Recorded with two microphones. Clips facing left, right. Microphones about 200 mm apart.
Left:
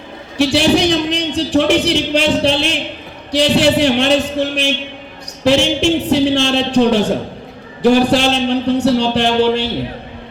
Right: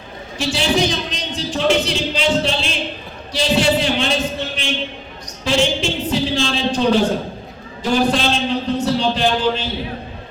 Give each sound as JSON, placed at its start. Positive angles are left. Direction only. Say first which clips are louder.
{"t": 0.3, "sound": "a man's voice", "louder": "left 6 dB", "side_deg": 65}